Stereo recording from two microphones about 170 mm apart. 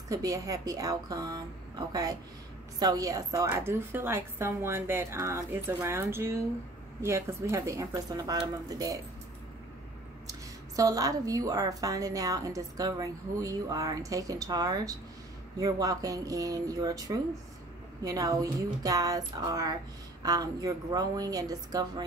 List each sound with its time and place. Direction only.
0.1 s a woman's voice: 20° right (ahead or behind)
10.8 s a woman's voice: 20° right (ahead or behind)